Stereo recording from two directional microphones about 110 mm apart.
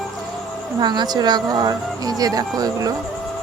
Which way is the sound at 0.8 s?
40° right (ahead or behind).